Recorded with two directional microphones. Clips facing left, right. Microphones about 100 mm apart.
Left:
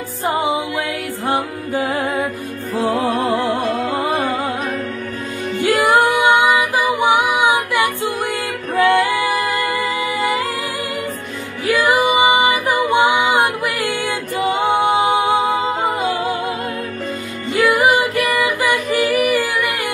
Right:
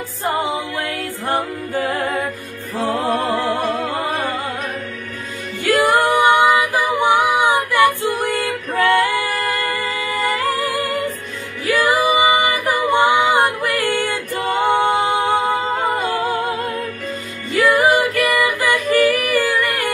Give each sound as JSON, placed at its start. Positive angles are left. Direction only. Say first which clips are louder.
{"t": 0.3, "sound": "music", "louder": "left 2 dB", "side_deg": 15}
{"t": 5.6, "sound": "music", "louder": "left 1 dB", "side_deg": 15}
{"t": 7.0, "sound": "humming", "louder": "right 1 dB", "side_deg": 15}
{"t": 8.0, "sound": "music", "louder": "right 1 dB", "side_deg": 15}
{"t": 10.7, "sound": "music", "louder": "right 3 dB", "side_deg": -45}
{"t": 11.7, "sound": "music", "louder": "left 1 dB", "side_deg": 20}
{"t": 17.5, "sound": "music", "louder": "even", "side_deg": 15}